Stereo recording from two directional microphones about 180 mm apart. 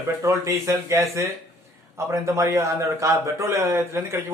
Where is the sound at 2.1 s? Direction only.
15° right (ahead or behind).